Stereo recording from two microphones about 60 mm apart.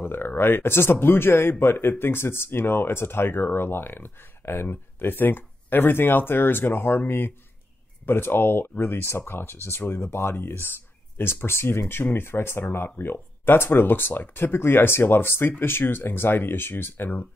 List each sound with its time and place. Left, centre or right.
0.0 s speech: left